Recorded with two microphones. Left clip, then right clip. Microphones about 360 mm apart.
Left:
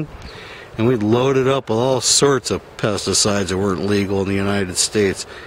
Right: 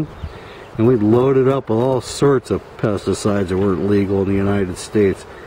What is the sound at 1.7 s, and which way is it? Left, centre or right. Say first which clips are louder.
Speech: even; centre.